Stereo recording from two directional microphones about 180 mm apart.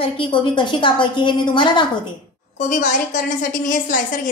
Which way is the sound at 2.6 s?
45° left (ahead or behind).